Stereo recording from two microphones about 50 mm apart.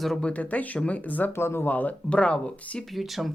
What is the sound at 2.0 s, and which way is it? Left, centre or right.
Speech, left.